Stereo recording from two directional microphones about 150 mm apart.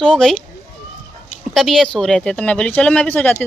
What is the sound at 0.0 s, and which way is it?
Speech, 5° left (ahead or behind).